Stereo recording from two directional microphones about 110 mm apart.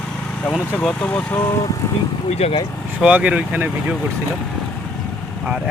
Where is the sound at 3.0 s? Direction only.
10° right (ahead or behind).